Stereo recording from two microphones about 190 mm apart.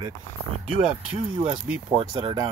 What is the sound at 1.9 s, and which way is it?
Speech, 25° right (ahead or behind).